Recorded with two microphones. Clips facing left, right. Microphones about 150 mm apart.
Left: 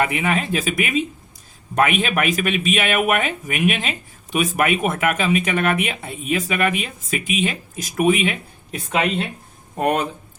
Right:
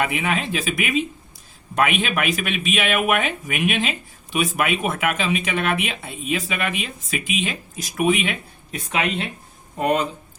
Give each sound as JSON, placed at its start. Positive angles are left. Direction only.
{"t": 0.0, "sound": "speech", "side_deg": 45}
{"t": 9.8, "sound": "speech", "side_deg": 55}